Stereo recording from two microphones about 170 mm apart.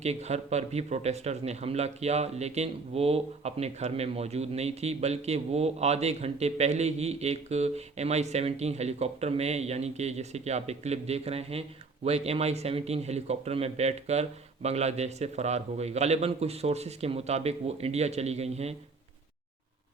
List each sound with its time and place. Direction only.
0.0 s speech: 40° right (ahead or behind)